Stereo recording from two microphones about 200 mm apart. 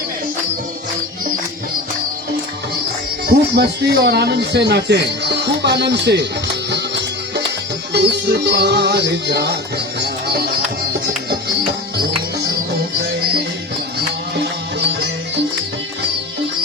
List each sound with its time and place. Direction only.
3.2 s speech: 55° right (ahead or behind)
7.9 s speech: 55° right (ahead or behind)